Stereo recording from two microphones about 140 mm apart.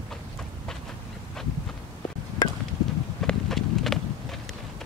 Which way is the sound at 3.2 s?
Centre (ahead or behind).